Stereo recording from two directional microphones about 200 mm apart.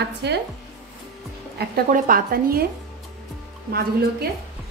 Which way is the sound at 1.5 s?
45° right (ahead or behind).